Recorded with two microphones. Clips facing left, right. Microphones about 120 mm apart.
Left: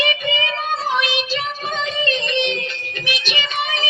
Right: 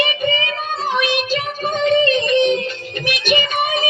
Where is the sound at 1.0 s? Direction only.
50° right (ahead or behind).